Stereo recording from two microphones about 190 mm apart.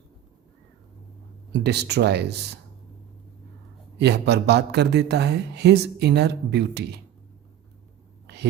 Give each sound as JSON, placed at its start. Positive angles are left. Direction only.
{"t": 1.5, "sound": "a man's voice", "side_deg": -60}
{"t": 3.9, "sound": "a man's voice", "side_deg": -60}